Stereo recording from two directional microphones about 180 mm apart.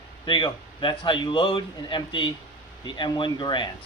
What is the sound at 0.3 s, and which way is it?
A man's voice, 25° left (ahead or behind).